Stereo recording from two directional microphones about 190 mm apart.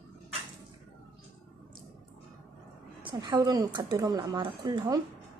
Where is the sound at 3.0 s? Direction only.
25° right (ahead or behind).